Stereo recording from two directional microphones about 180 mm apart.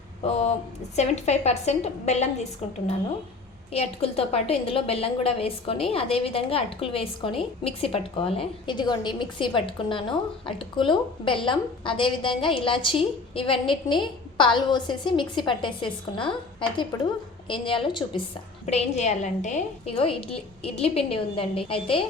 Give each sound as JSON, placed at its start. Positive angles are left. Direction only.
{"t": 0.2, "sound": "a woman's voice", "side_deg": 35}